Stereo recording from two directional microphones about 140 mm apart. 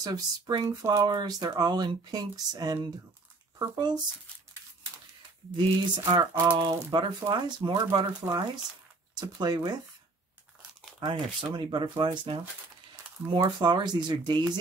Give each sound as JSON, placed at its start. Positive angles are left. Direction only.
{"t": 0.0, "sound": "speech", "side_deg": -30}
{"t": 5.6, "sound": "speech", "side_deg": -35}
{"t": 11.0, "sound": "speech", "side_deg": -35}